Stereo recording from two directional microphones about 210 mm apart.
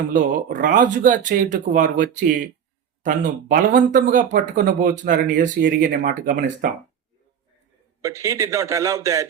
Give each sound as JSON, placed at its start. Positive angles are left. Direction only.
{"t": 0.1, "sound": "speech", "side_deg": -40}
{"t": 8.0, "sound": "speech", "side_deg": -15}